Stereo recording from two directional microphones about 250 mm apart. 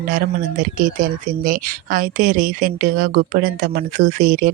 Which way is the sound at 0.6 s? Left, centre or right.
Right.